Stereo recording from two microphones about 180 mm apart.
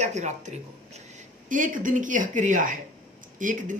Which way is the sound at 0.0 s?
40° right (ahead or behind).